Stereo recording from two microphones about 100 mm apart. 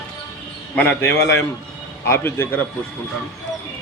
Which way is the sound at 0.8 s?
15° left (ahead or behind).